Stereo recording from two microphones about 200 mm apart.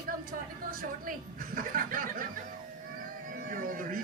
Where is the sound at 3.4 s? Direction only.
45° right (ahead or behind).